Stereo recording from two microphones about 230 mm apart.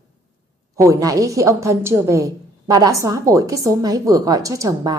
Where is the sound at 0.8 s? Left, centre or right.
Centre.